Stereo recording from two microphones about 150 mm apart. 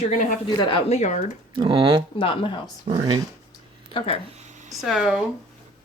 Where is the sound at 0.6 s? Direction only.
35° left (ahead or behind).